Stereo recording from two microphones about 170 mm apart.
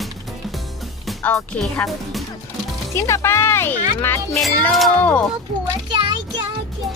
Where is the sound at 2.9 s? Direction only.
15° left (ahead or behind).